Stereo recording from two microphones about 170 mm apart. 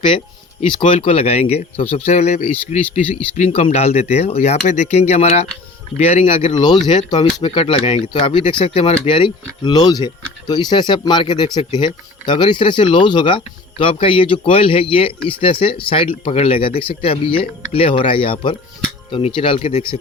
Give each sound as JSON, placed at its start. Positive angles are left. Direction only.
{"t": 0.7, "sound": "speech", "side_deg": 30}